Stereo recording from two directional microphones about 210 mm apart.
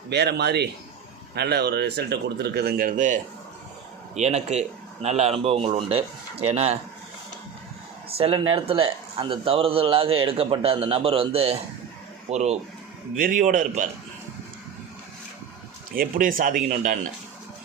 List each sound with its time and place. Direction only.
0.1 s a man's voice: 50° right (ahead or behind); by 6.7 s 30° right (ahead or behind)
8.2 s a man's voice: 25° right (ahead or behind)
16.0 s a man's voice: 40° right (ahead or behind)